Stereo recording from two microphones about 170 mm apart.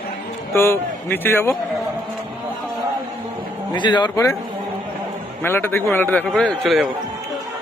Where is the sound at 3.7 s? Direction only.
25° left (ahead or behind).